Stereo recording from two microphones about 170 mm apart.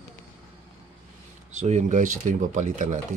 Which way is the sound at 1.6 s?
45° right (ahead or behind).